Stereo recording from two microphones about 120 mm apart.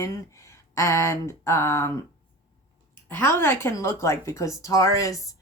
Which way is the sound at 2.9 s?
20° left (ahead or behind).